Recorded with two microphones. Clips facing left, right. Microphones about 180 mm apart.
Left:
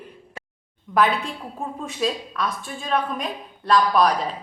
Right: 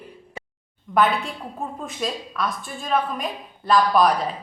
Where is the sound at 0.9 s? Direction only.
Centre (ahead or behind).